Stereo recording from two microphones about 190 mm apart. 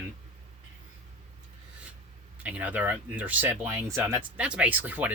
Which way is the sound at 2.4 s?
10° right (ahead or behind).